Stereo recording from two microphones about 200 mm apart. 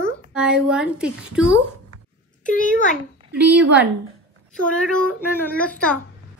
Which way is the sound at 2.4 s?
40° left (ahead or behind).